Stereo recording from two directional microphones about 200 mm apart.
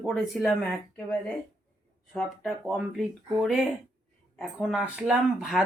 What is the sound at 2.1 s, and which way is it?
Speech, centre (ahead or behind).